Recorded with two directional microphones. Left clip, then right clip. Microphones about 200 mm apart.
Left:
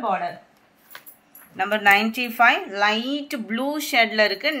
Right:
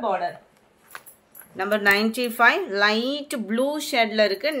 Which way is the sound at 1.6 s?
40° right (ahead or behind).